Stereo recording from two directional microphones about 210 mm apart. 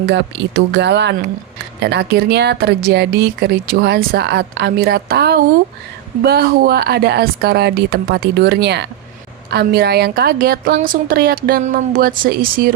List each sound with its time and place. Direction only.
0.0 s speech: 55° right (ahead or behind)